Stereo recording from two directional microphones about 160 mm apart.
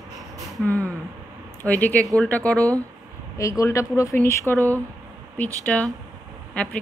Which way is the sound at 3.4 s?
20° left (ahead or behind).